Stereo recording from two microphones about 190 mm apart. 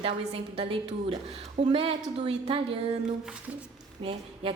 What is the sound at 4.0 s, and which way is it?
Speech, 30° right (ahead or behind).